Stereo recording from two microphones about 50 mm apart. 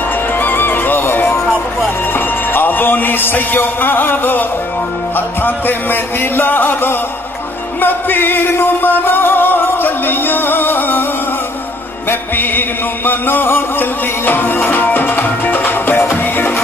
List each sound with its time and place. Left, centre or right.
0.3 s music: left
12.1 s music: left